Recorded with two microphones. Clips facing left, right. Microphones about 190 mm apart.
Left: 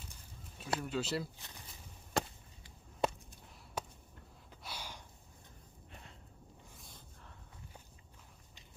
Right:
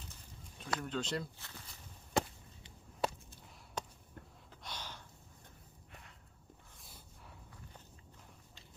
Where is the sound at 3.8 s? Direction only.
5° left (ahead or behind).